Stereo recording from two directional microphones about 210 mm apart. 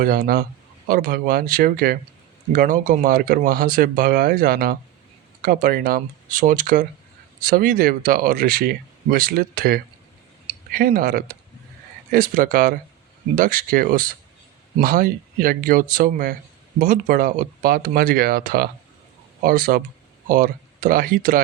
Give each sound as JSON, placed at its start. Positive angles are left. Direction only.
{"t": 0.0, "sound": "speech", "side_deg": -45}